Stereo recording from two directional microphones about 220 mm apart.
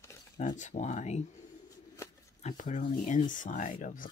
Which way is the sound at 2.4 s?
35° left (ahead or behind).